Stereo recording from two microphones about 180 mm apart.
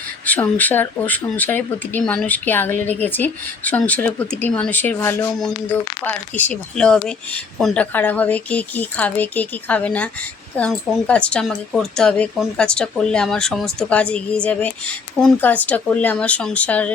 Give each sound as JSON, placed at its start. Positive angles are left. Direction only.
{"t": 0.3, "sound": "speech", "side_deg": 10}